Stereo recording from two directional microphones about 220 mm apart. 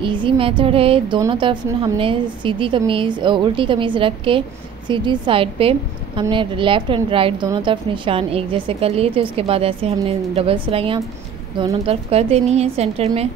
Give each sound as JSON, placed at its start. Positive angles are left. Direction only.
{"t": 0.0, "sound": "a woman's voice", "side_deg": -20}